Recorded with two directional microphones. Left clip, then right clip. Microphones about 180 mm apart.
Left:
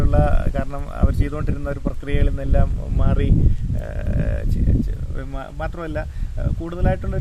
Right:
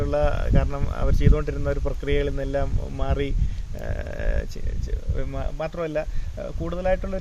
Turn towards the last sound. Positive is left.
turn(degrees=0)  # may be behind; listen again after turning